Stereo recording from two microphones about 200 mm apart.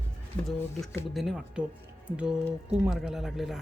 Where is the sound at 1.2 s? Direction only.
Centre (ahead or behind).